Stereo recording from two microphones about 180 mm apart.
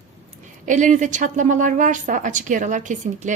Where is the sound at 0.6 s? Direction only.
45° right (ahead or behind).